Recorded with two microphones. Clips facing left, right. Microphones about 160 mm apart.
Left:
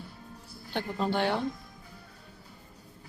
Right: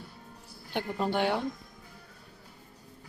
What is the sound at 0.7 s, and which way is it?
Speech, 15° right (ahead or behind).